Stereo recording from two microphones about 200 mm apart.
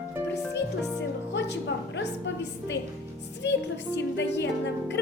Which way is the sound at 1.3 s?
60° left (ahead or behind).